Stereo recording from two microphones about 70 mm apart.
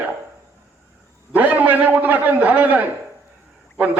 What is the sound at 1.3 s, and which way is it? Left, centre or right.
A man's voice, right.